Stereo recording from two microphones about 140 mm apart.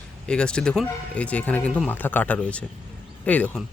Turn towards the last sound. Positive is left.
turn(degrees=10)  # may be behind; listen again after turning